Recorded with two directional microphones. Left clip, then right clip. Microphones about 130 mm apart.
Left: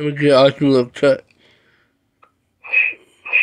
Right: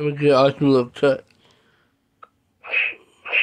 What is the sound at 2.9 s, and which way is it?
Radio, 15° right (ahead or behind).